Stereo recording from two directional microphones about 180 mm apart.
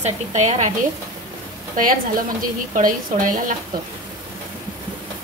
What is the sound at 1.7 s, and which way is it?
A woman's voice, 50° right (ahead or behind).